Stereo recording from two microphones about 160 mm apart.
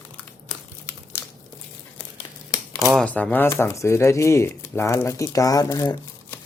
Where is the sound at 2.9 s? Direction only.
5° left (ahead or behind); by 5.9 s 20° left (ahead or behind).